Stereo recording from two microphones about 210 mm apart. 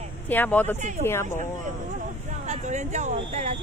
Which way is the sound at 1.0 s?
10° left (ahead or behind).